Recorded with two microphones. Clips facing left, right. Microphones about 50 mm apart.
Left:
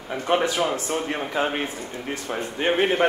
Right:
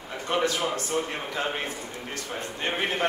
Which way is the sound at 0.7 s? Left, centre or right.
Left.